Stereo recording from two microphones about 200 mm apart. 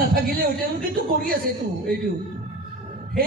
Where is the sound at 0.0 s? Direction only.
45° right (ahead or behind).